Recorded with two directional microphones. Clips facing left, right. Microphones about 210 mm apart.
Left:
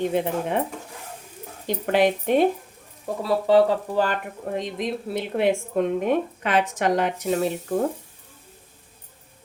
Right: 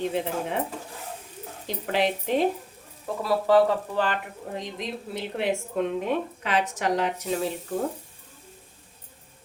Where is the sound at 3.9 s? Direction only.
40° left (ahead or behind).